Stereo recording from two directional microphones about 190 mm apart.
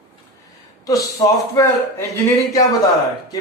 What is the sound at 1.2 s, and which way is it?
Speech, 20° left (ahead or behind).